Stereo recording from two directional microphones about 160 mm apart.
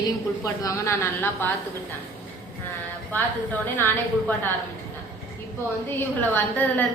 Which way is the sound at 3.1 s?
10° left (ahead or behind).